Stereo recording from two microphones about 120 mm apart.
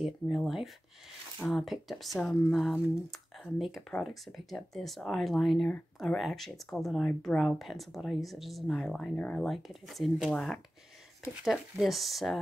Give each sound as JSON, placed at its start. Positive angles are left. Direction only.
{"t": 0.0, "sound": "speech", "side_deg": 0}